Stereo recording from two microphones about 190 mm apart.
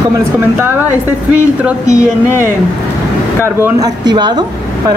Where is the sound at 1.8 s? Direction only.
15° left (ahead or behind).